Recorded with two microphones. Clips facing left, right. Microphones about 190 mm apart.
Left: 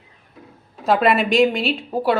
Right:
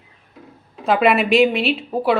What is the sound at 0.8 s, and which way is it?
A woman's voice, centre (ahead or behind).